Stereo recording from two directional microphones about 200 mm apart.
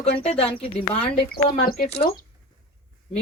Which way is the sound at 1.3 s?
50° left (ahead or behind).